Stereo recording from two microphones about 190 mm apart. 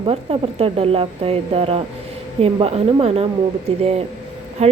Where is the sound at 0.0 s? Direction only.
30° right (ahead or behind).